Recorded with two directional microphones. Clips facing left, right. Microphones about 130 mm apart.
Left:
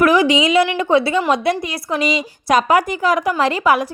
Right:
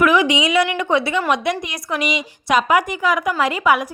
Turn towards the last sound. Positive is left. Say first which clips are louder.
# left 2 dB
turn(degrees=35)  # may be behind; listen again after turning